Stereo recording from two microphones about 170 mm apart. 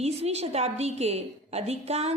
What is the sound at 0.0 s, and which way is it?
A woman's voice, 40° right (ahead or behind).